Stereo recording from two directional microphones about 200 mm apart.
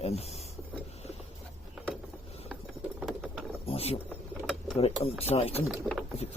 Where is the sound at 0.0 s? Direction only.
30° left (ahead or behind).